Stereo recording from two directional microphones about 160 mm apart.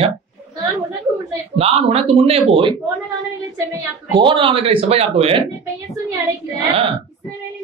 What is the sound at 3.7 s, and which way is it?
Speech, 30° right (ahead or behind).